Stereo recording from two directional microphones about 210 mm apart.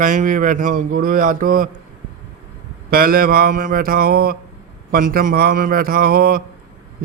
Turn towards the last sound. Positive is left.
turn(degrees=-45)  # may be behind; listen again after turning